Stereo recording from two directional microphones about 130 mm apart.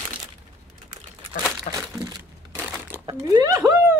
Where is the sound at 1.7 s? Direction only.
65° left (ahead or behind).